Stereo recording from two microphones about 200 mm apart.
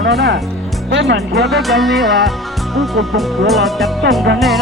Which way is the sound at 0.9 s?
65° right (ahead or behind).